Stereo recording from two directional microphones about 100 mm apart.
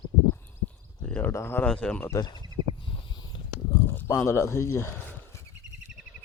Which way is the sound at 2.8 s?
50° left (ahead or behind).